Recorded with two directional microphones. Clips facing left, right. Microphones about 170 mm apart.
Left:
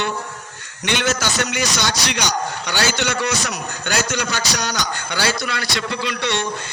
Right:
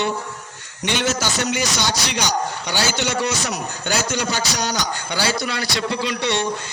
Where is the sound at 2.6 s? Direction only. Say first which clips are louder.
Left 3 dB; 65° left (ahead or behind).